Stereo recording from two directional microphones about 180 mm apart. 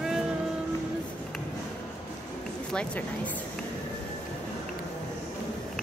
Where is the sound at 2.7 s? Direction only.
5° left (ahead or behind).